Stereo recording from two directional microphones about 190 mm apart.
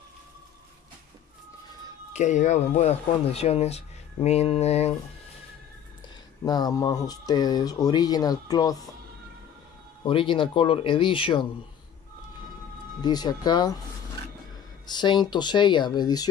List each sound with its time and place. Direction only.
2.1 s speech: 40° left (ahead or behind)
6.4 s speech: 20° left (ahead or behind)
10.0 s speech: 25° left (ahead or behind)
13.0 s speech: 20° left (ahead or behind)
14.9 s speech: 25° left (ahead or behind)